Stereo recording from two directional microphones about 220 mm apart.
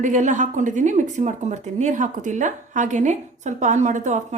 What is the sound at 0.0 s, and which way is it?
Speech, 35° right (ahead or behind).